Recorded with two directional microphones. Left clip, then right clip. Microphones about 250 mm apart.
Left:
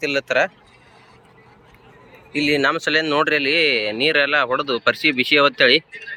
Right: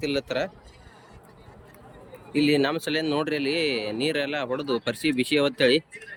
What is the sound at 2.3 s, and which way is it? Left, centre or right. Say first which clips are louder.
Speech: left 5 dB; centre.